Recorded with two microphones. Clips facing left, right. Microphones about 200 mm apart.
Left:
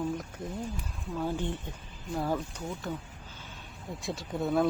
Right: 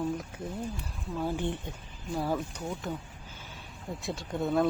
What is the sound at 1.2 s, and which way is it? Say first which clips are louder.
Speech: right 1 dB; 15° right (ahead or behind).